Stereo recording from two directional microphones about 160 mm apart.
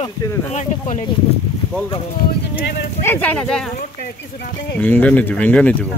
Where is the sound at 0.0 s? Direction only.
20° left (ahead or behind).